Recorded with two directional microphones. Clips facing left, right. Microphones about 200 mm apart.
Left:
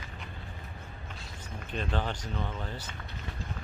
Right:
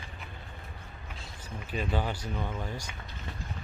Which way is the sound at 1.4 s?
5° right (ahead or behind).